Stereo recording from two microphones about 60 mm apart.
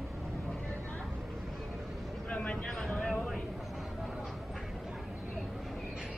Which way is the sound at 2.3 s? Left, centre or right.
Left.